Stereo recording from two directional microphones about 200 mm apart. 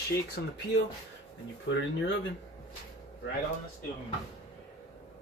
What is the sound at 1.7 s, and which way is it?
Speech, 65° left (ahead or behind).